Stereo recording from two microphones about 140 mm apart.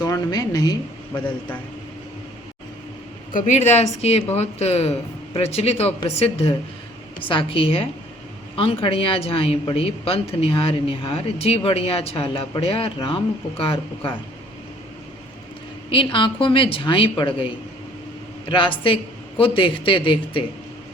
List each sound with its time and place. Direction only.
0.0 s a woman's voice: 30° left (ahead or behind)
3.3 s a woman's voice: 60° left (ahead or behind); by 14.1 s 40° left (ahead or behind)
15.9 s a woman's voice: 35° left (ahead or behind)
18.4 s a woman's voice: 35° left (ahead or behind)